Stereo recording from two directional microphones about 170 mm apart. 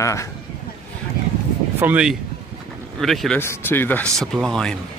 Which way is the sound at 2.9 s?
Centre (ahead or behind).